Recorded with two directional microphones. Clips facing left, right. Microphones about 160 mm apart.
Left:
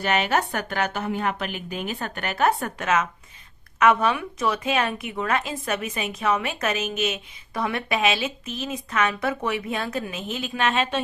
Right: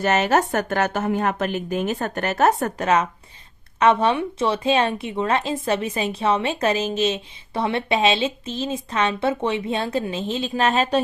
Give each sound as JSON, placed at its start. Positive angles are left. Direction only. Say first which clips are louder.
{"t": 0.0, "sound": "a woman's voice", "louder": "right 4 dB", "side_deg": -40}